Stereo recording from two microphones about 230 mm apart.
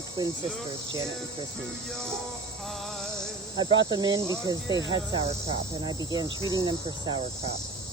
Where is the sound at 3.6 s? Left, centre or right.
Centre.